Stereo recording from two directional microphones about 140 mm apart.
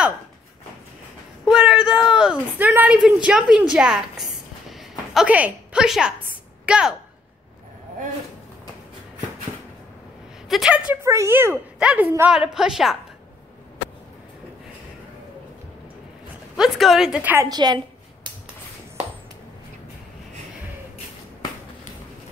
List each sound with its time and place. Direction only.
1.4 s a sound: 5° right (ahead or behind)
2.7 s a woman's voice: 10° right (ahead or behind)
10.5 s a woman's voice: 5° right (ahead or behind)
11.0 s a woman's voice: 20° right (ahead or behind); by 12.9 s 5° right (ahead or behind)
16.5 s a woman's voice: 5° right (ahead or behind)
17.5 s a woman's voice: 30° right (ahead or behind)